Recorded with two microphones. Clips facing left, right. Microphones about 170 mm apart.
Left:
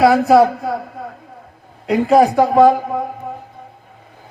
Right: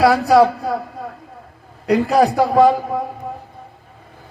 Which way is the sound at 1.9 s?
20° left (ahead or behind).